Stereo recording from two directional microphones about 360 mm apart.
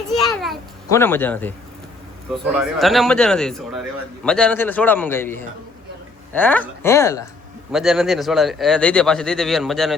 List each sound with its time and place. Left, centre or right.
0.1 s children playing: centre
2.3 s speech: centre